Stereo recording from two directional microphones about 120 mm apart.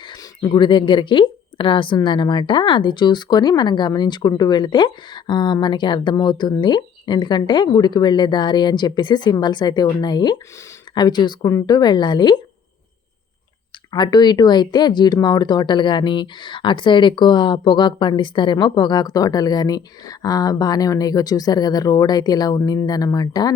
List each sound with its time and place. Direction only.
0.1 s speech: 40° left (ahead or behind)
13.9 s speech: 35° left (ahead or behind)